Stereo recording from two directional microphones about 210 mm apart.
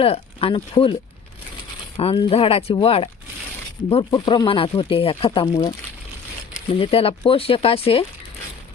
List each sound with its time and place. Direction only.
0.0 s speech: 25° left (ahead or behind)
2.0 s speech: 25° left (ahead or behind)